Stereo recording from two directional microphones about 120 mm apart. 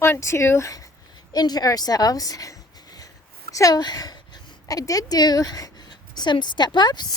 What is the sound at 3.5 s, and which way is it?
A woman's voice, 30° left (ahead or behind).